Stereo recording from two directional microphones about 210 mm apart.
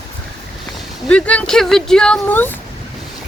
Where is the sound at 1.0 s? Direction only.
5° left (ahead or behind).